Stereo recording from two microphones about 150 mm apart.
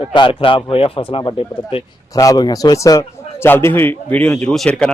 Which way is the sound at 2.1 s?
25° left (ahead or behind).